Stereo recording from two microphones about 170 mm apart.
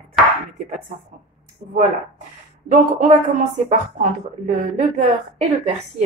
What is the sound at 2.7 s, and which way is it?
A woman's voice, 45° right (ahead or behind).